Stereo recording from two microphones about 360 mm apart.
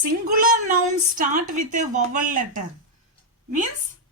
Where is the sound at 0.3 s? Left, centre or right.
Right.